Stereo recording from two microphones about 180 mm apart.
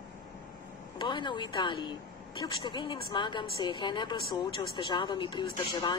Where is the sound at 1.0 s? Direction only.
25° left (ahead or behind).